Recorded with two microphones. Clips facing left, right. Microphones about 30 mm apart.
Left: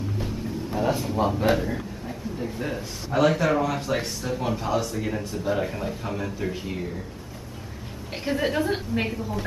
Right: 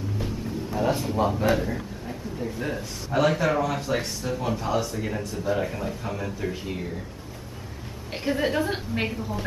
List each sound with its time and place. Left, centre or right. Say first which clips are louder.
0.7 s a man's voice: even; centre
5.2 s a man's voice: left 1 dB; centre
5.5 s a man's voice: even; centre
8.1 s a man's voice: even; centre